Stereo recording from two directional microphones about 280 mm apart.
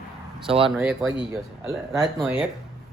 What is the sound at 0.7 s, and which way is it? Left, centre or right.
A man's voice, centre.